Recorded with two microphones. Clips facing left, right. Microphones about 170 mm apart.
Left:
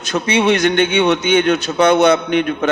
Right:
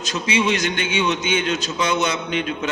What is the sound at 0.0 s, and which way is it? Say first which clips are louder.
A man's voice: left 6 dB; 60° left (ahead or behind).